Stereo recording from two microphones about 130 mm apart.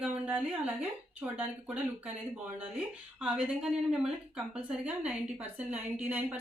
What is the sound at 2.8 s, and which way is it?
A woman's voice, 10° right (ahead or behind).